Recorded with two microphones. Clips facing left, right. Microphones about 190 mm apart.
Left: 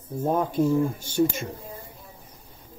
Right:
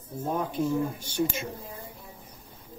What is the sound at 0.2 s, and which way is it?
Speech, 45° left (ahead or behind).